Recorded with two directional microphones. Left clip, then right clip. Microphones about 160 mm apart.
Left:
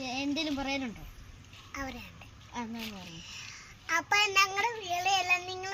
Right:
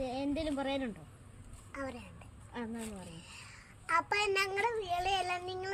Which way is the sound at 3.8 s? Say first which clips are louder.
Left 4 dB; 15° right (ahead or behind).